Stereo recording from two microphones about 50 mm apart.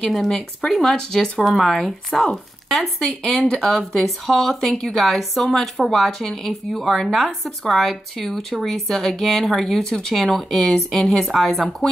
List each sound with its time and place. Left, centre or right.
0.1 s speech: centre